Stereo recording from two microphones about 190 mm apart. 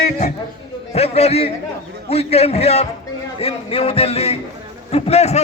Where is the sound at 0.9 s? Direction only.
35° left (ahead or behind).